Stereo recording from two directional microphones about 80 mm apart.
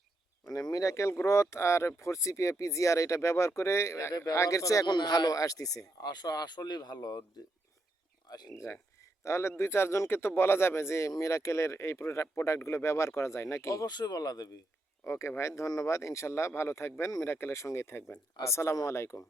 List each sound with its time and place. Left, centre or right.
0.4 s speech: left
4.9 s speech: left
8.3 s speech: left
8.5 s speech: left
13.8 s speech: left
15.0 s speech: left